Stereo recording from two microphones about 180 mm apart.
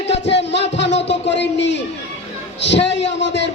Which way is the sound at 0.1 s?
75° left (ahead or behind).